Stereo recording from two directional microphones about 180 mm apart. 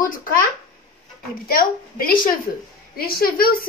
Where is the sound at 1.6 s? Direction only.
55° left (ahead or behind).